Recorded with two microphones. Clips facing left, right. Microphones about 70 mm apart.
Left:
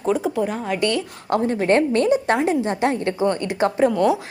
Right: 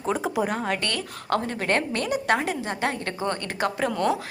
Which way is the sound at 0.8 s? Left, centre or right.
Left.